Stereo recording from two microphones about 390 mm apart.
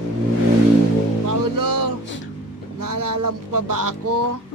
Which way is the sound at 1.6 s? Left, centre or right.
Right.